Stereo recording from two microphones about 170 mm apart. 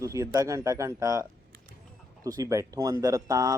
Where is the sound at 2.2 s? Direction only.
20° right (ahead or behind).